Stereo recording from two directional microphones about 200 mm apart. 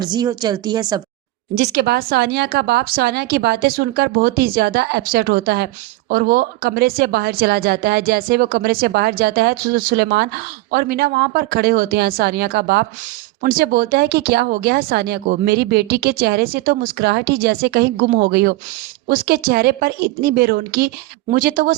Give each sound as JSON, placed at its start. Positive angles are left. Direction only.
{"t": 0.0, "sound": "speech", "side_deg": -20}
{"t": 1.5, "sound": "speech", "side_deg": -55}